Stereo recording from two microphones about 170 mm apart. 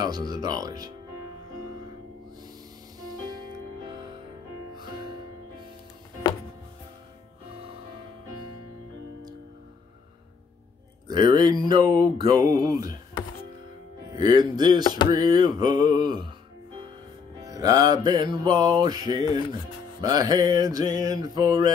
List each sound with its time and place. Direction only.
0.0 s music: 25° right (ahead or behind)
3.0 s music: 20° right (ahead or behind)
11.1 s music: 25° right (ahead or behind)
14.1 s music: 25° right (ahead or behind)
17.4 s music: 20° right (ahead or behind)